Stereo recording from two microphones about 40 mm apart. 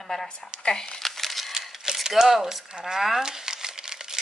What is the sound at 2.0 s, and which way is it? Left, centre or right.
Speech, centre.